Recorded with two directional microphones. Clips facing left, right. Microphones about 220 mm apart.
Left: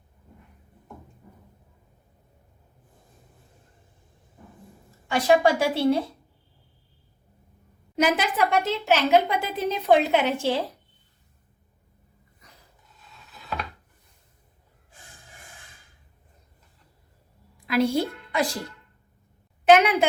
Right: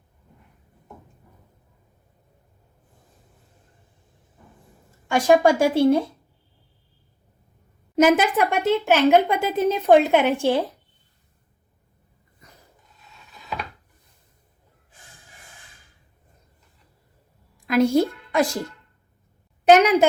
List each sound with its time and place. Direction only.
5.0 s a woman's voice: 45° right (ahead or behind)
7.9 s a woman's voice: 45° right (ahead or behind)
17.7 s speech: 45° right (ahead or behind)
19.6 s a woman's voice: 40° right (ahead or behind)